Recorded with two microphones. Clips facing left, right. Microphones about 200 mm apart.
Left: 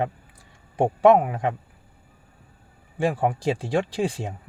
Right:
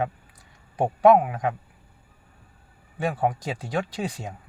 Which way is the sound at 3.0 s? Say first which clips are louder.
Left 2 dB; 30° left (ahead or behind).